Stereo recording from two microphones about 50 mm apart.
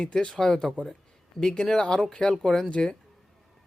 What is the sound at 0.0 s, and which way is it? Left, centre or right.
Speech, centre.